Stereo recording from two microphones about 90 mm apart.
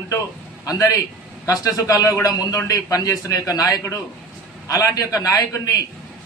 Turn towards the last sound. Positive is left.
turn(degrees=40)  # may be behind; listen again after turning